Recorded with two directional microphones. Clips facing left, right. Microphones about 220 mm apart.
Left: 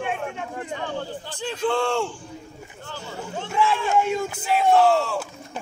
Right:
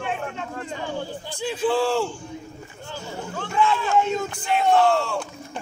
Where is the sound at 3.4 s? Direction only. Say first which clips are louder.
Right 1 dB; 10° left (ahead or behind).